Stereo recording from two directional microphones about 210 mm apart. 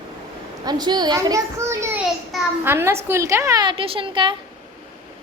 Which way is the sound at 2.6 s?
10° right (ahead or behind).